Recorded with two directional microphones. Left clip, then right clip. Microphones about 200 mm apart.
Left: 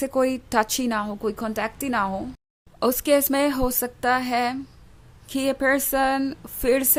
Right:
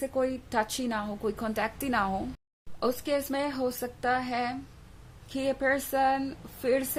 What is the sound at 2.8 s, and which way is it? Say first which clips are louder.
Speech: left 9 dB; 35° left (ahead or behind).